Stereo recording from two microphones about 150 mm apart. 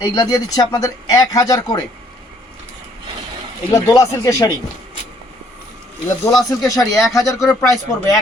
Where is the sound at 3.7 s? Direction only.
20° left (ahead or behind).